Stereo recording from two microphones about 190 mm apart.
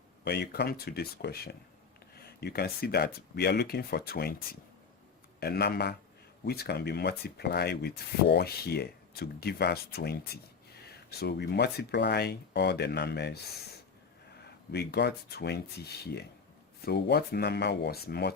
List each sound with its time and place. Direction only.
0.3 s speech: 60° left (ahead or behind)
5.4 s speech: 55° left (ahead or behind)